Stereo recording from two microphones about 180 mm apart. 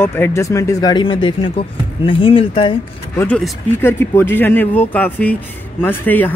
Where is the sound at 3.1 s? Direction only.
10° left (ahead or behind).